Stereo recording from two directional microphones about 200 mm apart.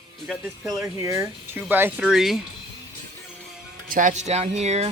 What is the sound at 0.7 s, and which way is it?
Speech, 15° right (ahead or behind).